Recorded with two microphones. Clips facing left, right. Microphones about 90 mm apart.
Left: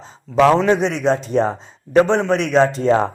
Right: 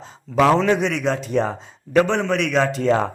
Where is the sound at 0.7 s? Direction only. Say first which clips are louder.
Left 3 dB; 30° left (ahead or behind).